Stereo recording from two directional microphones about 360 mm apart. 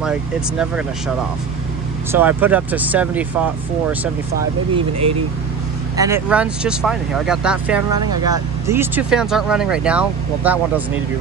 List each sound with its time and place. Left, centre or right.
0.0 s speech: centre
2.1 s speech: centre
4.7 s speech: centre